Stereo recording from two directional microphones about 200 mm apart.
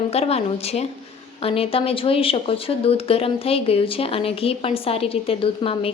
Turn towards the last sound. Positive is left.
turn(degrees=30)  # may be behind; listen again after turning